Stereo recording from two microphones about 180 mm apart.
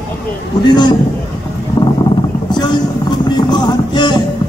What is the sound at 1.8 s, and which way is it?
Boat, 25° left (ahead or behind).